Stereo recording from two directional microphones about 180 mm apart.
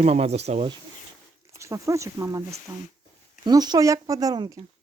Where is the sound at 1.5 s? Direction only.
15° right (ahead or behind).